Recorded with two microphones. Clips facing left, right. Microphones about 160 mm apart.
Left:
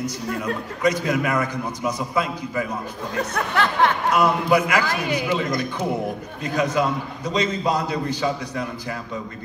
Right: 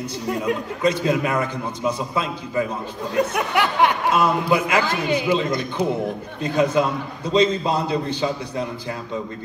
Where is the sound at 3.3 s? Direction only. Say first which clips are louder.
Right 1 dB; 15° right (ahead or behind).